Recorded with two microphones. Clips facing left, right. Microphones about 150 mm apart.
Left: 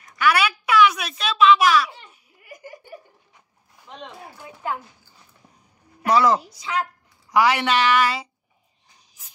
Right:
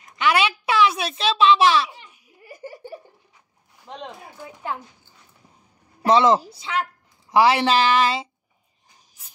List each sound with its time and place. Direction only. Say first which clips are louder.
0.0 s a woman's voice: even; 25° right (ahead or behind)
2.4 s laughter: right 3 dB; 30° right (ahead or behind)
6.0 s a woman's voice: right 2 dB; 25° right (ahead or behind)